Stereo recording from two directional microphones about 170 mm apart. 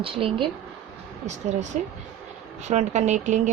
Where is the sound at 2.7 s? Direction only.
45° right (ahead or behind).